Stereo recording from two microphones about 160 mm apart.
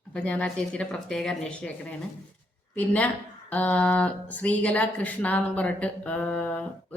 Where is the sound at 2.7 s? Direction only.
10° left (ahead or behind).